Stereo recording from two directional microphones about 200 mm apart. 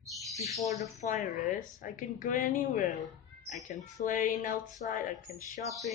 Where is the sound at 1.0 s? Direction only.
40° left (ahead or behind).